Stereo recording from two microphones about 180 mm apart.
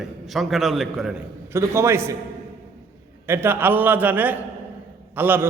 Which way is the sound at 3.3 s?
10° right (ahead or behind).